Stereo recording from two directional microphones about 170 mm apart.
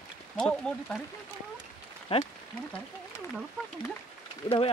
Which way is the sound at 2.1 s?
30° left (ahead or behind).